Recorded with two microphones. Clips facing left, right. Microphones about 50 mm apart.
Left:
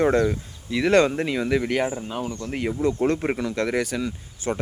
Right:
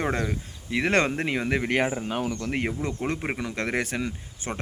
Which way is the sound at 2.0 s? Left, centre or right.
Right.